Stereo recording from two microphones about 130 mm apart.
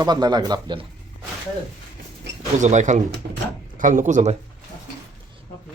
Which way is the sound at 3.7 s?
85° right.